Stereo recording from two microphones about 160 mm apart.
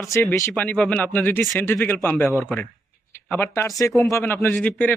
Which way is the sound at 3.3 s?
15° left (ahead or behind).